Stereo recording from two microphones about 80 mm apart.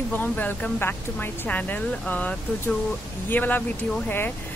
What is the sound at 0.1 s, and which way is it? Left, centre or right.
Speech, left.